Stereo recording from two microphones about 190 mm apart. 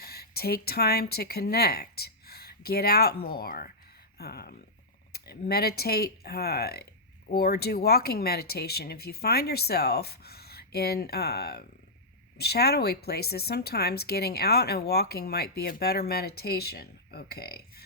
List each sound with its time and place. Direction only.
0.0 s a woman's voice: 55° left (ahead or behind)